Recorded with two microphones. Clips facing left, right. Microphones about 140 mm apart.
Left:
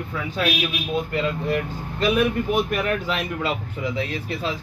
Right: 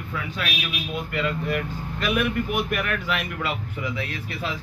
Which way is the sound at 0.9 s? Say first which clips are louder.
Left 2 dB; 30° left (ahead or behind).